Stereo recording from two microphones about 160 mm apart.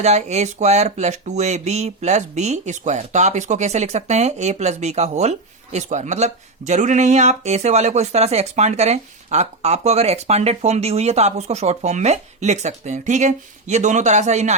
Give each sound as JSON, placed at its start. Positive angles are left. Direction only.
{"t": 0.0, "sound": "speech", "side_deg": -45}